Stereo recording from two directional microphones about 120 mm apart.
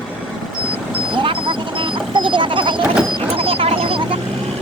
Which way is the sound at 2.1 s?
40° right (ahead or behind).